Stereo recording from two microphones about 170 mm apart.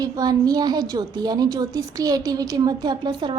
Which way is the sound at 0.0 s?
20° right (ahead or behind).